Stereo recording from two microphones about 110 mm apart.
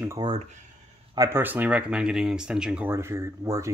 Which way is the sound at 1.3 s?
15° right (ahead or behind).